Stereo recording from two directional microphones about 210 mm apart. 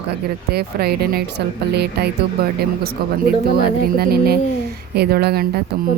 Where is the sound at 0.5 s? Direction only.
50° right (ahead or behind).